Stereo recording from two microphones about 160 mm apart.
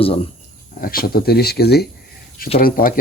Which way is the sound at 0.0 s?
35° left (ahead or behind).